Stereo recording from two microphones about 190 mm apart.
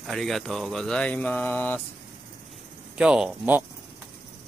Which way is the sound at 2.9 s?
5° right (ahead or behind).